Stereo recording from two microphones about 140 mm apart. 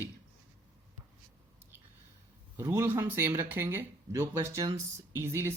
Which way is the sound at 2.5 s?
15° right (ahead or behind).